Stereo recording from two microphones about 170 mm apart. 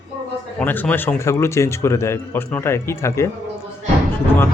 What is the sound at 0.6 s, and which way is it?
A man's voice, 10° left (ahead or behind).